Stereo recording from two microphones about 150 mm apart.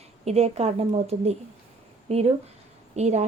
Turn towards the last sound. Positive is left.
turn(degrees=-50)  # may be behind; listen again after turning